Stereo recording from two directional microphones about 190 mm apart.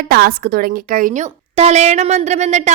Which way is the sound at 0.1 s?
55° right (ahead or behind).